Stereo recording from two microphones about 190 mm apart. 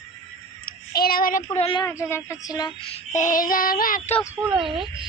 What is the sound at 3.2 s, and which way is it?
Child singing, 45° left (ahead or behind).